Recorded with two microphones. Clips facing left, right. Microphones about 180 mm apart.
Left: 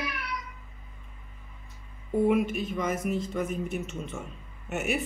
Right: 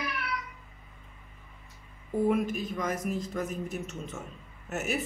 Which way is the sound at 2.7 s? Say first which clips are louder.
Left 4 dB; centre (ahead or behind).